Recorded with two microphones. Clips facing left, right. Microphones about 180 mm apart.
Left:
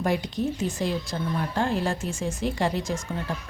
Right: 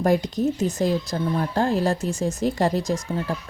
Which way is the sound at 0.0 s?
40° right (ahead or behind).